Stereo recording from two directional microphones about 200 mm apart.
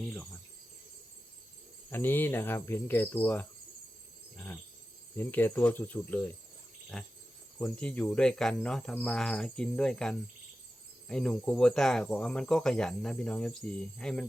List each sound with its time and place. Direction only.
0.0 s cricket: 5° left (ahead or behind)
1.9 s speech: 10° left (ahead or behind)
5.1 s speech: 10° left (ahead or behind)